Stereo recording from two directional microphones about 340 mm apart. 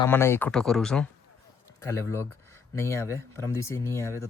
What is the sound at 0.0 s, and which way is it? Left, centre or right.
Speech, centre.